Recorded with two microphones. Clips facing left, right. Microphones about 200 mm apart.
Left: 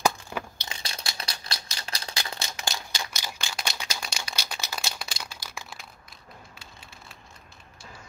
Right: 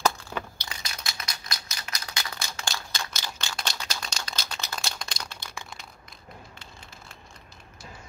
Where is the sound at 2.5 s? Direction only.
15° left (ahead or behind).